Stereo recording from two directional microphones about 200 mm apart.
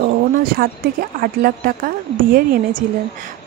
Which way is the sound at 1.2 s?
45° right (ahead or behind).